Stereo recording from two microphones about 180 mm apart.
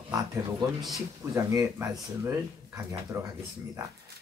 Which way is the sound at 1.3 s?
10° right (ahead or behind).